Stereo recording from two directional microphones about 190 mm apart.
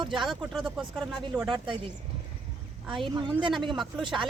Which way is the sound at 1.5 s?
25° right (ahead or behind).